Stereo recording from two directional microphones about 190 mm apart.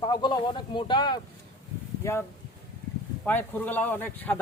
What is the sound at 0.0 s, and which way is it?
A man's voice, 25° left (ahead or behind).